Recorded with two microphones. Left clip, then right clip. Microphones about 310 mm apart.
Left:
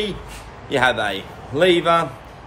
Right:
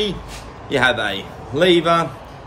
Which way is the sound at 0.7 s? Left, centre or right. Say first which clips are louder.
Right 1 dB; centre.